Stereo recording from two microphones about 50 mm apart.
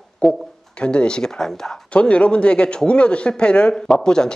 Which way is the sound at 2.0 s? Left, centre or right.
Left.